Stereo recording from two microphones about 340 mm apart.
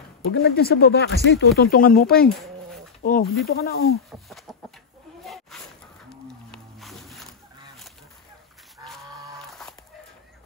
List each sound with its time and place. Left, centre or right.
0.3 s speech: left
2.2 s bee: centre
3.0 s speech: left
4.3 s chicken: centre
5.2 s snake: centre
6.0 s music: centre